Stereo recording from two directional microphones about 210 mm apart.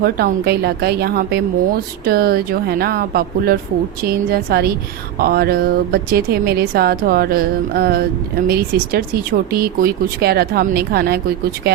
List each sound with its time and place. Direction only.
0.0 s speech: 45° right (ahead or behind)